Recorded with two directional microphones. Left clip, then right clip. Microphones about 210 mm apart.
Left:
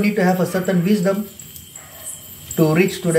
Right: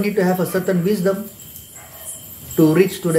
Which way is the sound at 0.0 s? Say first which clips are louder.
Even; 15° right (ahead or behind).